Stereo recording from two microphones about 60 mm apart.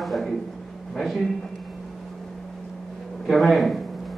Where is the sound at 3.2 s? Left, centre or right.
Centre.